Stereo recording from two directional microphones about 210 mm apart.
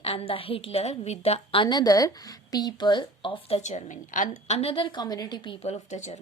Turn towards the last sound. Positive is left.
turn(degrees=35)  # may be behind; listen again after turning